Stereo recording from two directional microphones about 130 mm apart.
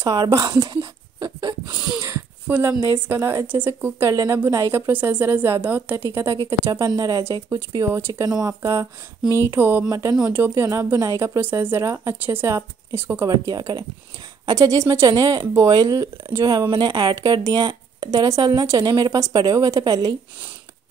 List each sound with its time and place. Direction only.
0.0 s a woman's voice: 25° right (ahead or behind)
0.6 s a sound: 35° right (ahead or behind)
2.4 s a woman's voice: 10° right (ahead or behind)
4.1 s a woman's voice: 30° right (ahead or behind); by 6.0 s 15° right (ahead or behind)
6.7 s a woman's voice: 30° right (ahead or behind)
9.8 s a woman's voice: 25° right (ahead or behind)
13.3 s a woman's voice: 30° right (ahead or behind)